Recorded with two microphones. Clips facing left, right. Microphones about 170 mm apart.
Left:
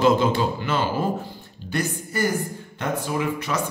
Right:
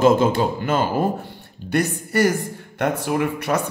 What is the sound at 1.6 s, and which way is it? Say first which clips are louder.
A woman's voice: right 5 dB; 70° right (ahead or behind).